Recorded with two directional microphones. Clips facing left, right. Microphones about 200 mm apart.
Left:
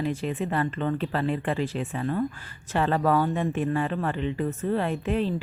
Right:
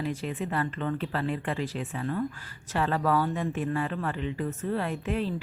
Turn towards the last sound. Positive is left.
turn(degrees=25)  # may be behind; listen again after turning